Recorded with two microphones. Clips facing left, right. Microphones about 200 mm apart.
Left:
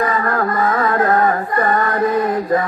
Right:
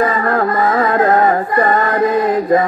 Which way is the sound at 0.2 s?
25° right (ahead or behind).